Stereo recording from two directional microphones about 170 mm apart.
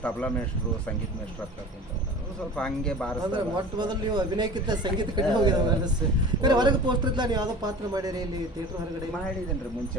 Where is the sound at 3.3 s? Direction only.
25° right (ahead or behind).